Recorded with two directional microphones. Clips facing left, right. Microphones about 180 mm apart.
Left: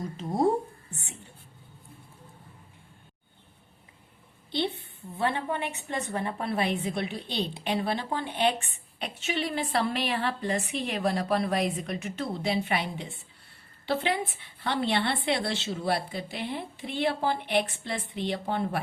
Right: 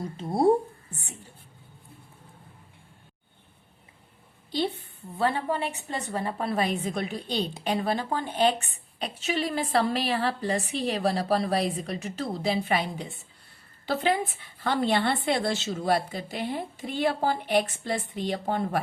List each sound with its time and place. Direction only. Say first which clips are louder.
0.2 s a woman's voice: right 3 dB; 35° right (ahead or behind)
5.2 s a woman's voice: right 2 dB; 35° right (ahead or behind)